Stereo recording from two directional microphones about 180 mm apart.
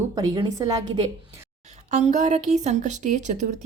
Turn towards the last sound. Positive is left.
turn(degrees=-40)  # may be behind; listen again after turning